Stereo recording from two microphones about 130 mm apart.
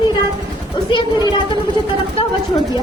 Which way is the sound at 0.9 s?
35° left (ahead or behind).